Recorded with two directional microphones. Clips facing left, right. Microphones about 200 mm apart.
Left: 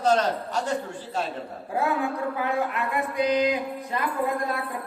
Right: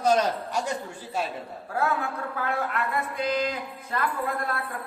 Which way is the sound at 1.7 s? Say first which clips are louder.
Left 2 dB; 15° left (ahead or behind).